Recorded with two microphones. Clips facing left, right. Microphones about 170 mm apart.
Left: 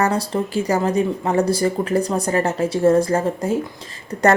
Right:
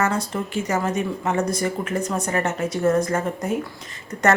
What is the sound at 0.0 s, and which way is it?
Speech, 35° left (ahead or behind).